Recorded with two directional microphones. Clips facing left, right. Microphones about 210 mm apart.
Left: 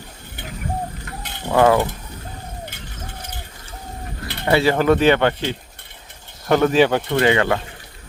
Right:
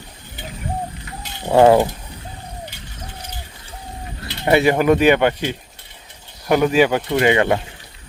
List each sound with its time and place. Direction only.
1.5 s mechanisms: 25° right (ahead or behind)
4.4 s speech: 20° right (ahead or behind)